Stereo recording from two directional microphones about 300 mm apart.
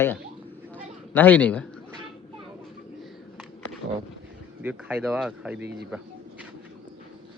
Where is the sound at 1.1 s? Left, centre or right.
Centre.